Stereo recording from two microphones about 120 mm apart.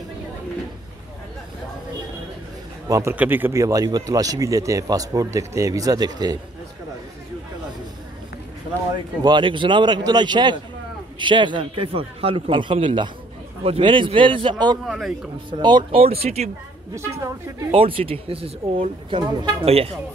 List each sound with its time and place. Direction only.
2.9 s speech: 25° right (ahead or behind)
3.2 s speech: 15° right (ahead or behind); by 6.3 s 35° right (ahead or behind)
8.9 s a man's voice: 40° right (ahead or behind)
14.9 s speech: 5° right (ahead or behind)
15.6 s a man's voice: 40° right (ahead or behind)
16.0 s speech: 55° right (ahead or behind)
17.6 s speech: 50° right (ahead or behind)